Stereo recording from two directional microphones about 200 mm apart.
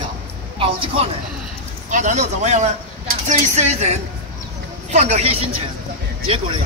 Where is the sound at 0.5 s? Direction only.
30° right (ahead or behind).